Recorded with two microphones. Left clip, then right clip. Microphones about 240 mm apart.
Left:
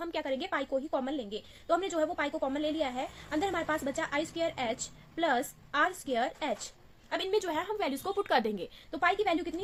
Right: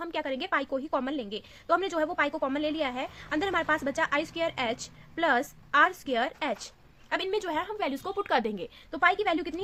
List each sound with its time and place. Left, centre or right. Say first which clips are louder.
0.0 s a woman's voice: right 2 dB; centre